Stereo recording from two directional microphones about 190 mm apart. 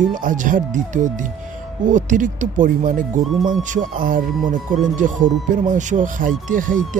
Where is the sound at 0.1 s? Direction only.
45° right (ahead or behind).